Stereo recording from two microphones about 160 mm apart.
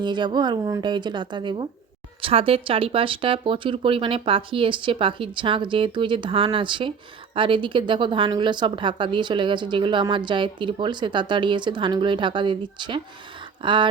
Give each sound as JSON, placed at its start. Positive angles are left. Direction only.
{"t": 0.0, "sound": "a woman's voice", "side_deg": -30}